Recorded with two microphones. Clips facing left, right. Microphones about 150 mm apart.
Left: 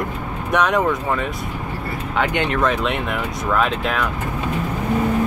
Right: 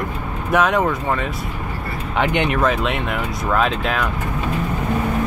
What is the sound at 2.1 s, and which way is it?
Speech, 20° right (ahead or behind).